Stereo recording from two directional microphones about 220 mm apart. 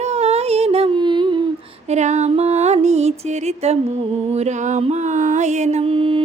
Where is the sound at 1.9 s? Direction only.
30° right (ahead or behind).